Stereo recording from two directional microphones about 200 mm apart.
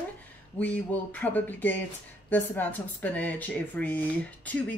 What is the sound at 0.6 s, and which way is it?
Speech, 10° left (ahead or behind).